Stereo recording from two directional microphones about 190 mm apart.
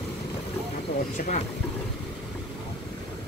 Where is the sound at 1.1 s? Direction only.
40° left (ahead or behind).